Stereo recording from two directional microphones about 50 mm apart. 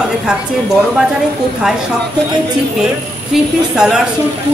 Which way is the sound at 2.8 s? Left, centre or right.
Centre.